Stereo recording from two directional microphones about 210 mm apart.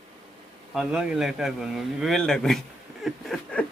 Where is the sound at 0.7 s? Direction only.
5° right (ahead or behind).